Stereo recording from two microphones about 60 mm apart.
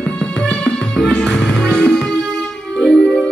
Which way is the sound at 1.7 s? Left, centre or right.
Centre.